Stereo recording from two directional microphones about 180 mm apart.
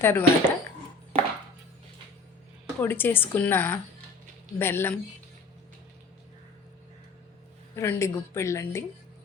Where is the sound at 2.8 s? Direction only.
10° left (ahead or behind).